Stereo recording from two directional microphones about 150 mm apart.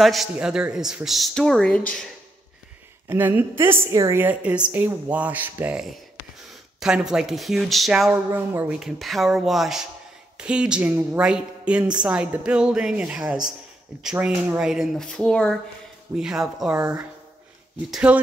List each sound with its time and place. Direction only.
0.0 s speech: centre (ahead or behind)
3.1 s a woman's voice: 15° right (ahead or behind)
8.7 s a woman's voice: centre (ahead or behind)
16.7 s speech: 25° right (ahead or behind)
17.9 s a woman's voice: 5° right (ahead or behind)